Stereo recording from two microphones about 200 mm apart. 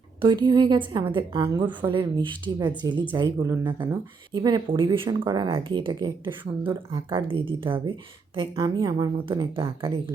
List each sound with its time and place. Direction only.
0.2 s speech: 25° right (ahead or behind)
6.6 s a woman's voice: 10° right (ahead or behind)
7.1 s speech: 25° right (ahead or behind)